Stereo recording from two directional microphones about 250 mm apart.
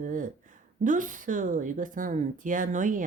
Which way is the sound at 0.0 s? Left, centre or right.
Right.